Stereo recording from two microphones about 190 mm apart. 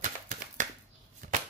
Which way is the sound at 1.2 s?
45° right (ahead or behind).